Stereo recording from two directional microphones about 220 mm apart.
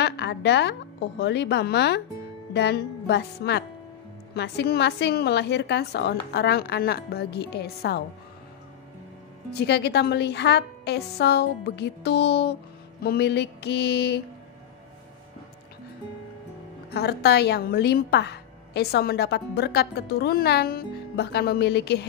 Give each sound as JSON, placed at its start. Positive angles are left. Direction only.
{"t": 0.0, "sound": "a woman's voice", "side_deg": 50}
{"t": 9.6, "sound": "a woman's voice", "side_deg": 50}
{"t": 16.9, "sound": "a woman's voice", "side_deg": 45}